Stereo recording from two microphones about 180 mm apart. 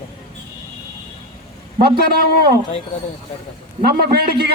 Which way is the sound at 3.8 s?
60° right (ahead or behind).